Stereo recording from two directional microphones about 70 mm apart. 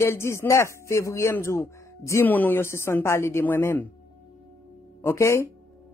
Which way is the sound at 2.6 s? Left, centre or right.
Left.